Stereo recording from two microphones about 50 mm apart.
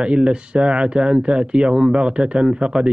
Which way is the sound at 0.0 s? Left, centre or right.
Right.